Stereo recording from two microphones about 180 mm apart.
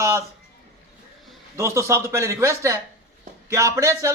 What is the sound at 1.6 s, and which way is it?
Speech, 15° right (ahead or behind).